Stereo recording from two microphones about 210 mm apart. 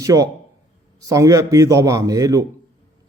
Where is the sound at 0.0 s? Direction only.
15° right (ahead or behind).